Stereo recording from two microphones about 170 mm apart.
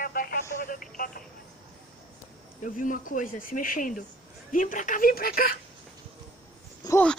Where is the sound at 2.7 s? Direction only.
50° left (ahead or behind).